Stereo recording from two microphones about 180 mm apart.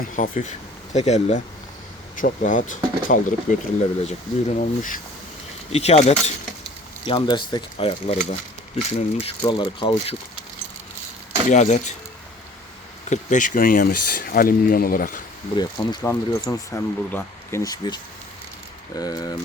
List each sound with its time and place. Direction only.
0.0 s speech: 45° left (ahead or behind); by 10.2 s 30° left (ahead or behind)
11.4 s speech: 40° left (ahead or behind)
13.1 s speech: 45° left (ahead or behind)
15.5 s speech: 25° left (ahead or behind)